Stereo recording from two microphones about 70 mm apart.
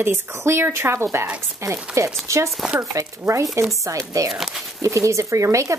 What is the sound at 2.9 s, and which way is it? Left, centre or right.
Speech, right.